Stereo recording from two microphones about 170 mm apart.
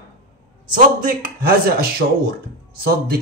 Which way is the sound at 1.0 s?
60° right (ahead or behind).